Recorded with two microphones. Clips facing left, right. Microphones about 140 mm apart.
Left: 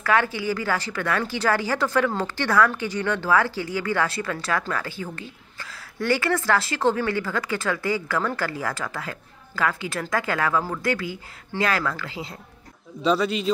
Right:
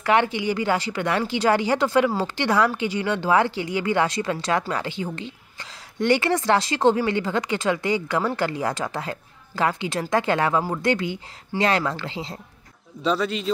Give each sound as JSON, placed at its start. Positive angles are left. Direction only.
{"t": 0.0, "sound": "a woman's voice", "side_deg": -20}
{"t": 13.0, "sound": "speech", "side_deg": 5}